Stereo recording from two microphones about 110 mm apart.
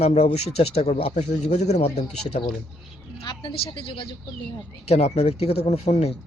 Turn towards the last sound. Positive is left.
turn(degrees=75)  # may be behind; listen again after turning